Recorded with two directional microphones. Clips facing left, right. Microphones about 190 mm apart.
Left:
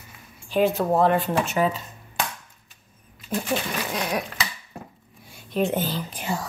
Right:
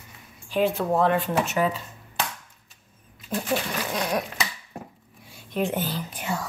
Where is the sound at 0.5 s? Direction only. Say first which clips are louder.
Left 2 dB; 40° left (ahead or behind).